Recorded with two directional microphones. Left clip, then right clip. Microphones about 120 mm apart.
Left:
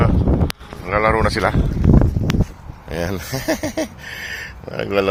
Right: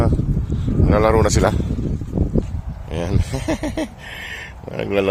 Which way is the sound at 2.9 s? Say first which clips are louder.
Left 2 dB; 20° right (ahead or behind).